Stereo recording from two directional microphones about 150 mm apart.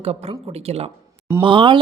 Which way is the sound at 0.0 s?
40° right (ahead or behind).